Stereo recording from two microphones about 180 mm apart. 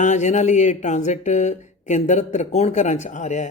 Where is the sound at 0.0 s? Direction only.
40° left (ahead or behind).